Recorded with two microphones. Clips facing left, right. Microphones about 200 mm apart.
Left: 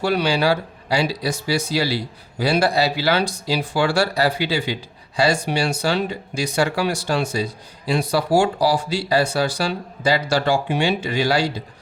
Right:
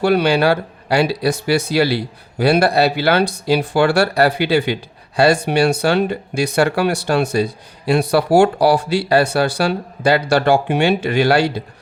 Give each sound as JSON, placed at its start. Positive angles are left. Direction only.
{"t": 0.0, "sound": "speech", "side_deg": -60}